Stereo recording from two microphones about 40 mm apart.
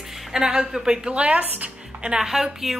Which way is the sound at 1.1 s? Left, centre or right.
Right.